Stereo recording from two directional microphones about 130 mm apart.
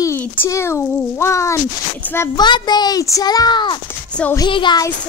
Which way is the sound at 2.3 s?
35° left (ahead or behind).